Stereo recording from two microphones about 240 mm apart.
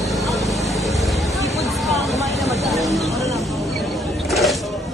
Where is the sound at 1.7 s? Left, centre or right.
Centre.